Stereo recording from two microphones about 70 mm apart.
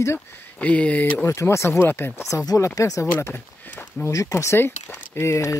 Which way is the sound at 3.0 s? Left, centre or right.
Left.